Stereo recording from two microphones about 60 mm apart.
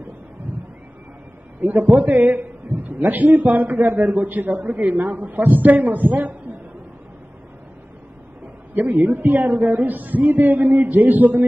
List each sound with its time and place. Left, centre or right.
1.6 s a man's voice: right
8.7 s a man's voice: right